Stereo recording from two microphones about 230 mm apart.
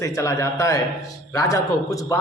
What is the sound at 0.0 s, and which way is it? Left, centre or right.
A man's voice, centre.